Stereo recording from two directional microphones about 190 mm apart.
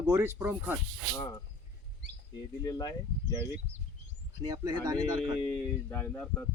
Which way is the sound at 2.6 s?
20° left (ahead or behind).